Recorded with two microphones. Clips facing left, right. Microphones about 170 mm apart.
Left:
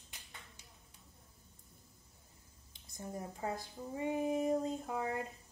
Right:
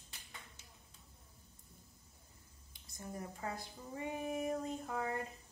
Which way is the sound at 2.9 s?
20° left (ahead or behind).